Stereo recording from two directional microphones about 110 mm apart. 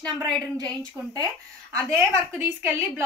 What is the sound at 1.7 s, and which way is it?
Speech, 25° right (ahead or behind).